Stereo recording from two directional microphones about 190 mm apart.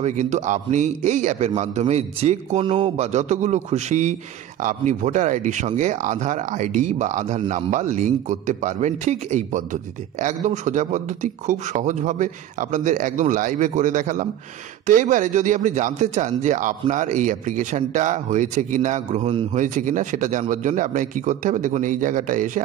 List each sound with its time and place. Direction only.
0.0 s speech: 40° right (ahead or behind)